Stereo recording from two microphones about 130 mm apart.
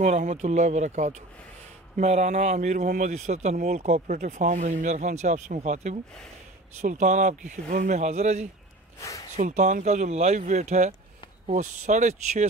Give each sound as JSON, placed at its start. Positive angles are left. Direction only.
{"t": 0.0, "sound": "speech", "side_deg": -70}